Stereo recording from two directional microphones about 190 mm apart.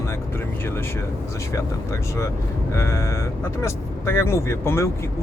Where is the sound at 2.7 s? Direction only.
15° left (ahead or behind).